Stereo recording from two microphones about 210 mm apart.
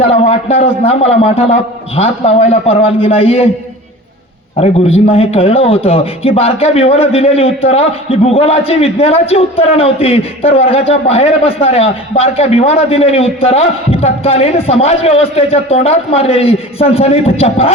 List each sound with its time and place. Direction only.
0.0 s a man's voice: 30° left (ahead or behind)
4.6 s a man's voice: 30° left (ahead or behind)